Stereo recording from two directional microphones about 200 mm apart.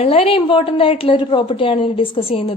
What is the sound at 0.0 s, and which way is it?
A woman's voice, 30° left (ahead or behind).